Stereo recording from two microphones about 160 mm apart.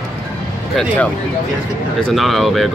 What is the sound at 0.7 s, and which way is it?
Speech, 5° left (ahead or behind).